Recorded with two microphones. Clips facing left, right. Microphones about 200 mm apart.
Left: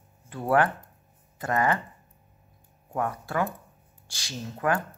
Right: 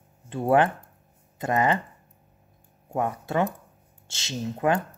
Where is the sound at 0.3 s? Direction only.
25° right (ahead or behind).